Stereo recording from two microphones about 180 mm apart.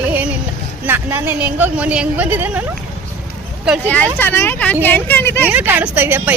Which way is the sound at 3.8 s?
10° left (ahead or behind).